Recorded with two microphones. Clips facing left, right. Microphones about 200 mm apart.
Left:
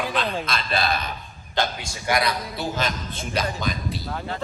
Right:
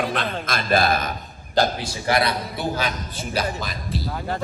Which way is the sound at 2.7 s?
5° right (ahead or behind).